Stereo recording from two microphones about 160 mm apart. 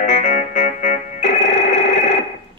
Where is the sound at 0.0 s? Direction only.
50° left (ahead or behind).